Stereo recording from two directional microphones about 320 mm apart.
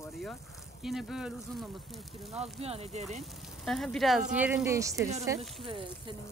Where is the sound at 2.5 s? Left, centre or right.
Centre.